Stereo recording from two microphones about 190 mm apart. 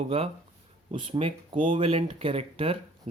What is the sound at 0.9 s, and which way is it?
Speech, 25° right (ahead or behind).